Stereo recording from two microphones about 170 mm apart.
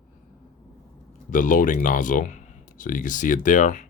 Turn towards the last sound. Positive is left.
turn(degrees=50)  # may be behind; listen again after turning